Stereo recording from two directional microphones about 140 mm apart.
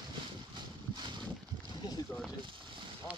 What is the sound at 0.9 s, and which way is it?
Boat, 35° right (ahead or behind).